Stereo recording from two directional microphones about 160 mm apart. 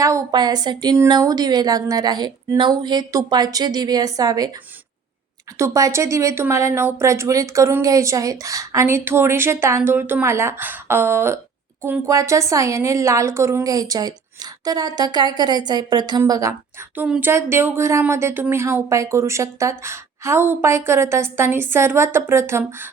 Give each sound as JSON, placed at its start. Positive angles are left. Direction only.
{"t": 0.0, "sound": "speech", "side_deg": -20}
{"t": 5.5, "sound": "speech", "side_deg": -20}